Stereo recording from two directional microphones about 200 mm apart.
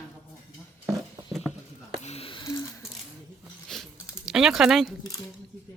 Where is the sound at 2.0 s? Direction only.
30° left (ahead or behind).